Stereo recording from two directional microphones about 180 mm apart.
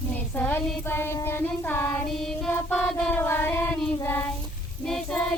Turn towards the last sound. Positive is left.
turn(degrees=5)  # may be behind; listen again after turning